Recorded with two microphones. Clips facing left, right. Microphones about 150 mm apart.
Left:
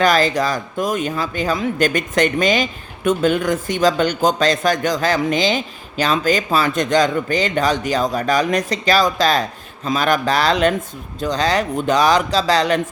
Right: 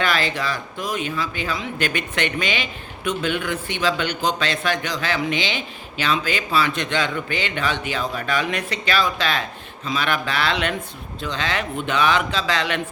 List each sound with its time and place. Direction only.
0.0 s speech: 40° left (ahead or behind)